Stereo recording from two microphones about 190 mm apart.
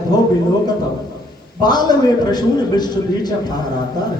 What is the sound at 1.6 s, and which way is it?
A man's voice, 20° left (ahead or behind).